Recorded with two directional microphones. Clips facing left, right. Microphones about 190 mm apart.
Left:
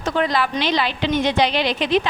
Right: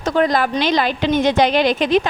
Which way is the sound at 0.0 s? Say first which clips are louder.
Right 4 dB; 45° right (ahead or behind).